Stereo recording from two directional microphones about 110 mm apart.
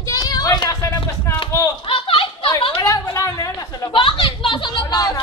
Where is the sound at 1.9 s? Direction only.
50° left (ahead or behind).